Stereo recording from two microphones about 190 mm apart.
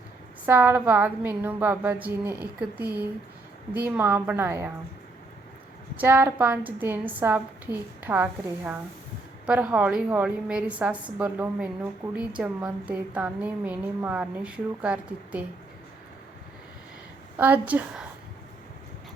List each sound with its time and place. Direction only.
0.4 s a woman's voice: 10° right (ahead or behind)
6.0 s a woman's voice: 10° right (ahead or behind)
17.3 s a woman's voice: 10° right (ahead or behind)